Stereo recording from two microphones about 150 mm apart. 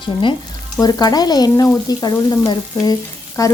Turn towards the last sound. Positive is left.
turn(degrees=25)  # may be behind; listen again after turning